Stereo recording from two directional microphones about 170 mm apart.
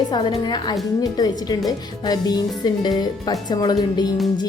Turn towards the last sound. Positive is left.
turn(degrees=25)  # may be behind; listen again after turning